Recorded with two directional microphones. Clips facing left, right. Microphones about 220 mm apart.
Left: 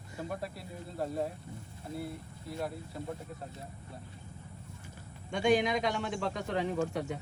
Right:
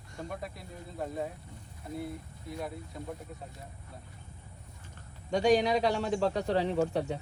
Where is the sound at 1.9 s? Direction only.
30° left (ahead or behind).